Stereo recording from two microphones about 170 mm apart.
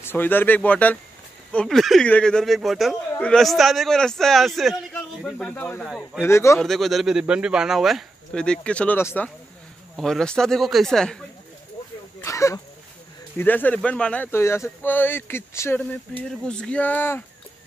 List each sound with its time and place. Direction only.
0.0 s speech: 10° left (ahead or behind)
5.9 s speech: centre (ahead or behind)
6.2 s speech: 15° left (ahead or behind)
6.6 s speech: centre (ahead or behind)
12.2 s speech: 20° left (ahead or behind)